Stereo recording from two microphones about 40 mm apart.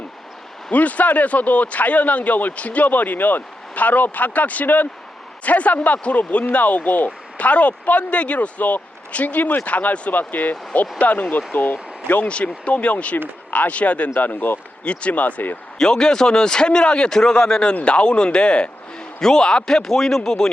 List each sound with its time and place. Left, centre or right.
0.7 s speech: left
10.1 s speech: left
12.3 s speech: left
14.1 s speech: left
14.3 s speech: left
14.8 s speech: left
15.8 s speech: centre